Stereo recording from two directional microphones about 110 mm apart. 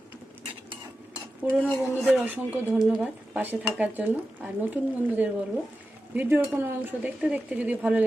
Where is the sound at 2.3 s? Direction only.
15° right (ahead or behind).